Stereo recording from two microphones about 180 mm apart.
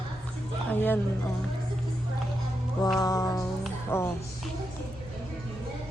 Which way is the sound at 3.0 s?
20° left (ahead or behind).